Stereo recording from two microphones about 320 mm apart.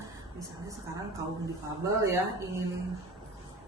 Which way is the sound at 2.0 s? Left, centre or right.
Centre.